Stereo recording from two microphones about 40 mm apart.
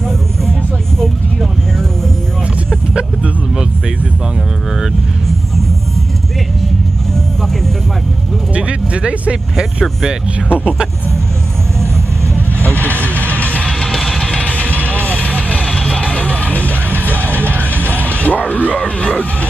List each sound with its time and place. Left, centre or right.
8.5 s speech: right
12.7 s music: right
13.4 s music: left
14.2 s vehicle: left
16.0 s music: left
16.9 s music: right
17.9 s a sound: left